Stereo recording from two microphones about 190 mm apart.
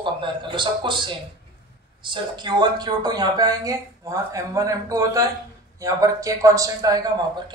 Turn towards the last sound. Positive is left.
turn(degrees=-20)  # may be behind; listen again after turning